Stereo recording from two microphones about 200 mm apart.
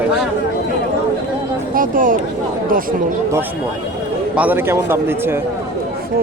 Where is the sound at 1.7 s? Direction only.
45° right (ahead or behind).